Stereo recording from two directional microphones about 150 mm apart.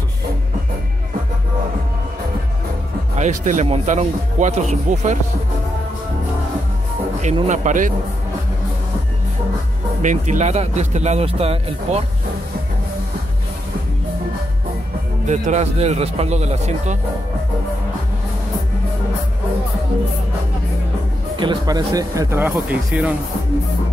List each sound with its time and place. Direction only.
3.2 s speech: 55° right (ahead or behind)
7.4 s speech: 55° right (ahead or behind)
10.0 s speech: 55° right (ahead or behind)
15.2 s speech: 50° right (ahead or behind)
21.4 s speech: 30° right (ahead or behind); by 23.1 s 10° right (ahead or behind)